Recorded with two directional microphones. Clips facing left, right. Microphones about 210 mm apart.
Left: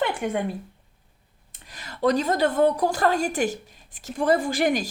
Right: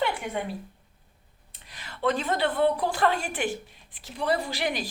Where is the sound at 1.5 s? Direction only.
45° left (ahead or behind).